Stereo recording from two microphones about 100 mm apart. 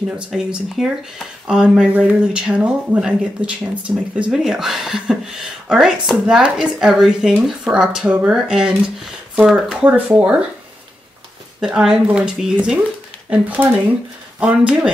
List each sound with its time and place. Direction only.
0.3 s speech: 5° right (ahead or behind)
11.6 s speech: 5° right (ahead or behind)